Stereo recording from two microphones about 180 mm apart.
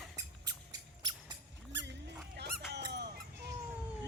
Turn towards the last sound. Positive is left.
turn(degrees=-65)  # may be behind; listen again after turning